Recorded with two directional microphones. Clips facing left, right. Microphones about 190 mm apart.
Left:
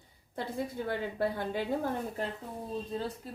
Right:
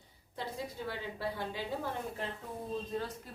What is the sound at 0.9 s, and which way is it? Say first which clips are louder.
Speech: left 7 dB; 50° left (ahead or behind).